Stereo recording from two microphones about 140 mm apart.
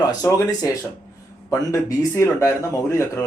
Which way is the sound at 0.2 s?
25° left (ahead or behind).